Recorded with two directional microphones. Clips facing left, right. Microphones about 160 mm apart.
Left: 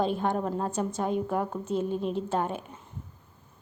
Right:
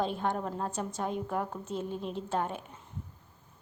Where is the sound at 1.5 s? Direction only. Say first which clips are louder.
Left 7 dB; 55° left (ahead or behind).